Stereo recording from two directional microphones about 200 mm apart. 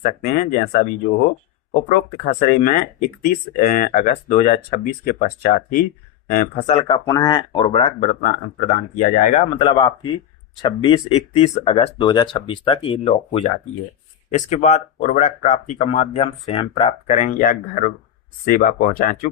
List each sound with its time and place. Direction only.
0.0 s speech: 45° left (ahead or behind)
1.9 s speech: 40° left (ahead or behind)
9.6 s speech: 25° left (ahead or behind)
17.1 s speech: 40° left (ahead or behind)